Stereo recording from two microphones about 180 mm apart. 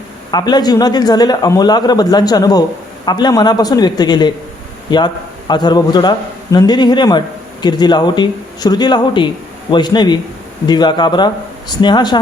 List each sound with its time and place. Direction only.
0.3 s speech: 25° left (ahead or behind)